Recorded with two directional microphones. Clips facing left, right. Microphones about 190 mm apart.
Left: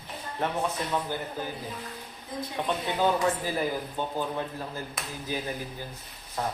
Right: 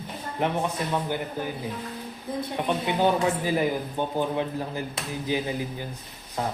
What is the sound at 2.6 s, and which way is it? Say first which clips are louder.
Speech: right 3 dB; 15° right (ahead or behind).